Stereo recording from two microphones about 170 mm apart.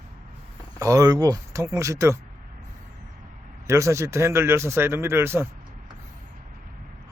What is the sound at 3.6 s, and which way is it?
Speech, 15° right (ahead or behind).